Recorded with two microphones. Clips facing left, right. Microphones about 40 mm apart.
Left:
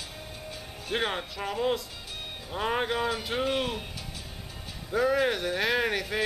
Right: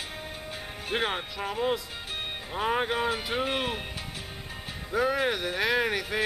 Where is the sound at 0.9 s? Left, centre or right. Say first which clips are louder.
Even; centre.